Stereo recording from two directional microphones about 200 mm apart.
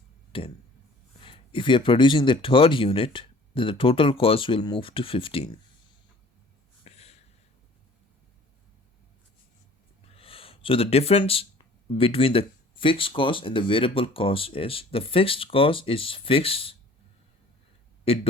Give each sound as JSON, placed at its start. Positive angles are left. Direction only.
{"t": 0.3, "sound": "speech", "side_deg": 25}
{"t": 6.8, "sound": "a sound", "side_deg": 30}
{"t": 10.2, "sound": "speech", "side_deg": 30}
{"t": 18.0, "sound": "speech", "side_deg": 30}